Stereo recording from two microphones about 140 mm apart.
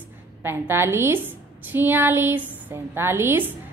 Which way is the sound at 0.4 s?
15° right (ahead or behind).